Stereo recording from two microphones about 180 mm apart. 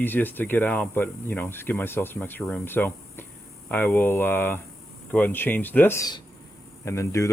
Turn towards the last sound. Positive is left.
turn(degrees=15)  # may be behind; listen again after turning